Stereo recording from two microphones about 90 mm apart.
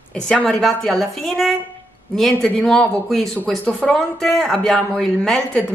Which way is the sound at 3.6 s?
10° left (ahead or behind).